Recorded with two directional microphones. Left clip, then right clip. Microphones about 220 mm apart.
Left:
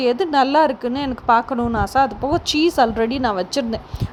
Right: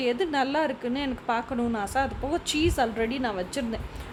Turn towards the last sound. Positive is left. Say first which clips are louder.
# left 9 dB
turn(degrees=25)  # may be behind; listen again after turning